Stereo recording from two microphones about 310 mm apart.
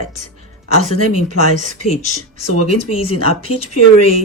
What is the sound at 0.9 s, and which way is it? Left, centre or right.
Speech, left.